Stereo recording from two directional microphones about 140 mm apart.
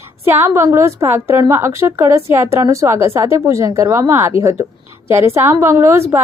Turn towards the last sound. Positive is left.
turn(degrees=-20)  # may be behind; listen again after turning